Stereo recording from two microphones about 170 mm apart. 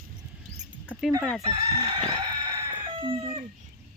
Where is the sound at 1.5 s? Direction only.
25° right (ahead or behind).